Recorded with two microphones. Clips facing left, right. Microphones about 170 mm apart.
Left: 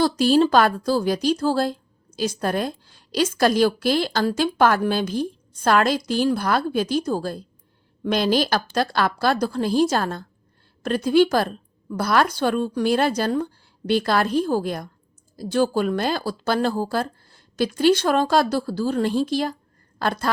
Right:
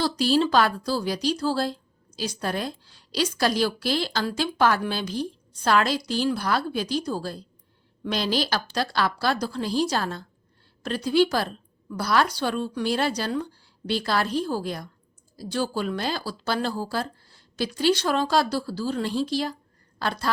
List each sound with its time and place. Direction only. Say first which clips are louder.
0.0 s speech: left 5 dB; 50° left (ahead or behind)